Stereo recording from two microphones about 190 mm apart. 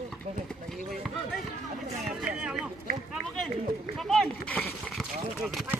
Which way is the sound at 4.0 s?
Centre (ahead or behind).